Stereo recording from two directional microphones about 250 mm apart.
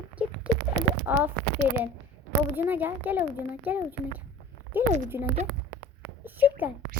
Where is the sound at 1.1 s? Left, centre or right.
Centre.